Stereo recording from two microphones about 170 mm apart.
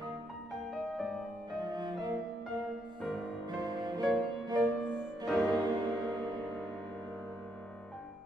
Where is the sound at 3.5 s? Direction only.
25° right (ahead or behind).